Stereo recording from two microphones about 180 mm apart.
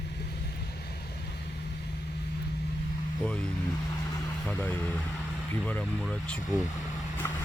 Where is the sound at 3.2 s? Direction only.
5° left (ahead or behind).